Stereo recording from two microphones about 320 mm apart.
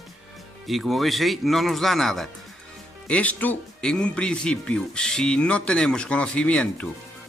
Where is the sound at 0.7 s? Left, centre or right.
Centre.